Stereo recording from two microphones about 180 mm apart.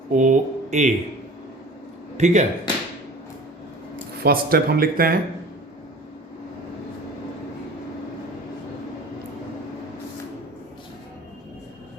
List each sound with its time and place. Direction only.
0.1 s speech: 45° right (ahead or behind)
2.1 s a man's voice: 40° right (ahead or behind)
4.2 s speech: 60° right (ahead or behind)